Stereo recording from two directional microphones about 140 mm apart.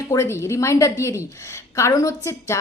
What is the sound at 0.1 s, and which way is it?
A woman's voice, 20° left (ahead or behind).